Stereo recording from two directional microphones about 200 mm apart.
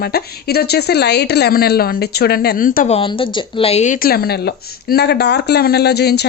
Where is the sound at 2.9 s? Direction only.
25° left (ahead or behind).